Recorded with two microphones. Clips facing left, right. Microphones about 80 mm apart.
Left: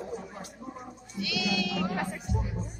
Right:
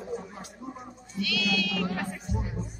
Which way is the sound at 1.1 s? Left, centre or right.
Centre.